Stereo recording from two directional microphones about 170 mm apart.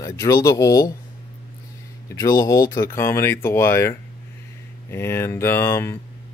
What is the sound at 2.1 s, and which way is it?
Speech, 20° left (ahead or behind).